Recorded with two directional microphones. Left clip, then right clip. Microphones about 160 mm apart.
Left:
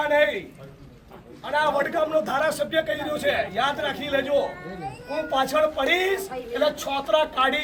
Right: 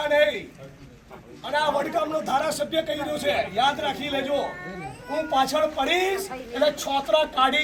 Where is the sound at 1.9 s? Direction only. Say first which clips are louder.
Left 1 dB; centre (ahead or behind).